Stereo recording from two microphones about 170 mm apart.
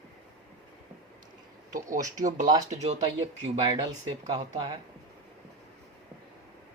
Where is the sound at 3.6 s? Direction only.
25° right (ahead or behind).